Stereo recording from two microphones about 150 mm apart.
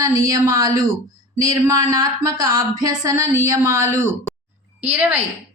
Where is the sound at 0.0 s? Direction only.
25° right (ahead or behind).